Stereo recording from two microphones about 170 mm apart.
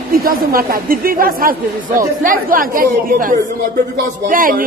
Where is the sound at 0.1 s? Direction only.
60° right (ahead or behind).